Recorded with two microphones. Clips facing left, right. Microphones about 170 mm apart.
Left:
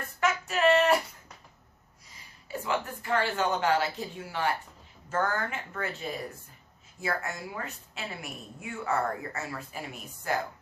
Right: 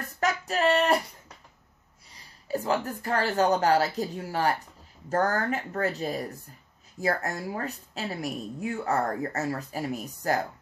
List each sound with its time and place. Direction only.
0.2 s female singing: 35° right (ahead or behind)
2.1 s a woman's voice: 35° right (ahead or behind)